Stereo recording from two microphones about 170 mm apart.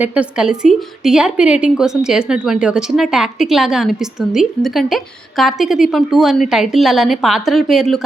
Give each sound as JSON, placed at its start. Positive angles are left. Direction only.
{"t": 0.0, "sound": "a woman's voice", "side_deg": -5}